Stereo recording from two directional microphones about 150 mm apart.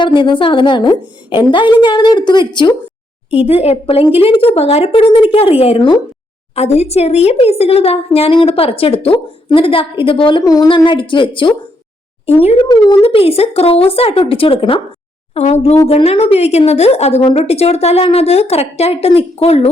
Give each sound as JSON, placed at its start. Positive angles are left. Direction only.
{"t": 0.0, "sound": "a woman's voice", "side_deg": 30}
{"t": 12.6, "sound": "a woman's voice", "side_deg": 25}